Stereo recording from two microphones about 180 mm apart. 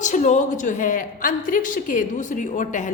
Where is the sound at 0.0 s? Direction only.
45° left (ahead or behind).